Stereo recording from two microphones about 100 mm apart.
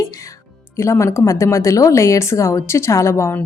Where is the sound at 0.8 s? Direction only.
30° left (ahead or behind).